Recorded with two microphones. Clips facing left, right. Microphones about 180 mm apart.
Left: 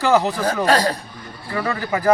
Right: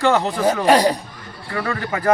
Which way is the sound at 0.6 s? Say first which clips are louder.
Right 3 dB; 15° right (ahead or behind).